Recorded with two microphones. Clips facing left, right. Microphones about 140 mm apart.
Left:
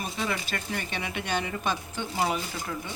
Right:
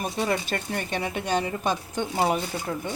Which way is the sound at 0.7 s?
40° right (ahead or behind).